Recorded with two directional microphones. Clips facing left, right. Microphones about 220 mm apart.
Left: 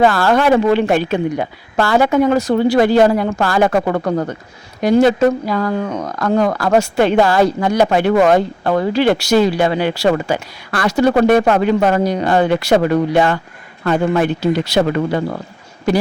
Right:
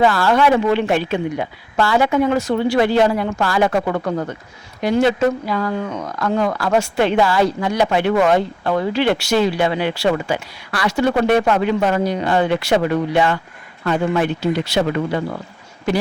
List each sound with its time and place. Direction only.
0.0 s speech: 50° left (ahead or behind)